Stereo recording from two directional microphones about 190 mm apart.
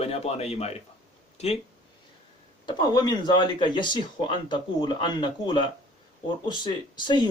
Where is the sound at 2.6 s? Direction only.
20° left (ahead or behind).